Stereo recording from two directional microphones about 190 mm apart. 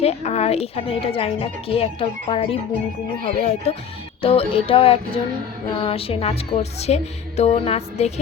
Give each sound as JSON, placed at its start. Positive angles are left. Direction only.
{"t": 0.0, "sound": "a woman's voice", "side_deg": 35}
{"t": 4.2, "sound": "music", "side_deg": 30}
{"t": 5.7, "sound": "a woman's voice", "side_deg": 30}